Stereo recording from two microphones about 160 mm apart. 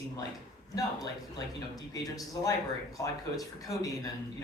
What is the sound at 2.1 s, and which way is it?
Speech, 20° left (ahead or behind).